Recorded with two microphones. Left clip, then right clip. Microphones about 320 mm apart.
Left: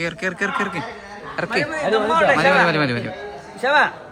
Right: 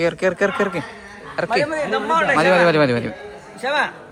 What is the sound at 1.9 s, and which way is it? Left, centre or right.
A woman's voice, centre.